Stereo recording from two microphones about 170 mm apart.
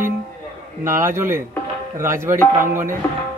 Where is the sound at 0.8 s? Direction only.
15° right (ahead or behind).